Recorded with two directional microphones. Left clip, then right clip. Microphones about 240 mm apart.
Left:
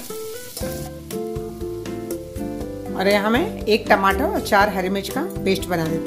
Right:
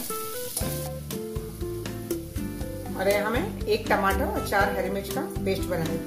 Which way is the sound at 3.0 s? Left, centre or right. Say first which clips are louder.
Left 6 dB; left.